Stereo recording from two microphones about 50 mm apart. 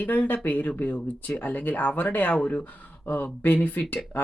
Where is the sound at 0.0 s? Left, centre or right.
Left.